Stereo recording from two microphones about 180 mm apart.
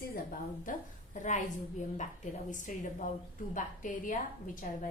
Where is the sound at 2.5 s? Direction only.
45° left (ahead or behind).